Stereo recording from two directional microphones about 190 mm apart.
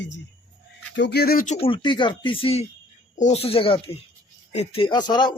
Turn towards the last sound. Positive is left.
turn(degrees=20)  # may be behind; listen again after turning